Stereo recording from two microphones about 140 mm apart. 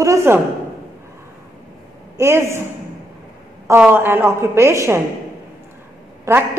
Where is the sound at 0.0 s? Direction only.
20° right (ahead or behind).